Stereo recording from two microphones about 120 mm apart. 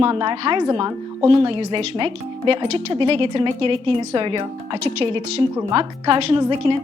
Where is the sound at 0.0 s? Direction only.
45° right (ahead or behind).